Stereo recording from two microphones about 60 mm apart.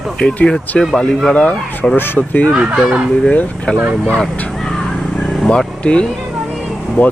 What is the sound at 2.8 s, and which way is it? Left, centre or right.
Speech, centre.